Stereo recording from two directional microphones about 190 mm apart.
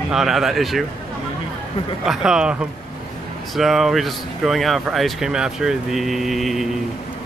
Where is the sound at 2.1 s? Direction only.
5° right (ahead or behind).